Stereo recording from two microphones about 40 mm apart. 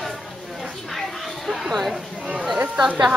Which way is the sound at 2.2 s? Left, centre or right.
Right.